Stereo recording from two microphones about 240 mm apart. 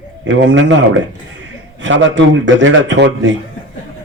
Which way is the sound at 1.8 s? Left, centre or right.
Right.